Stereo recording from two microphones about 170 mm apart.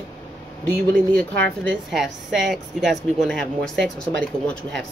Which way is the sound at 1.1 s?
5° left (ahead or behind).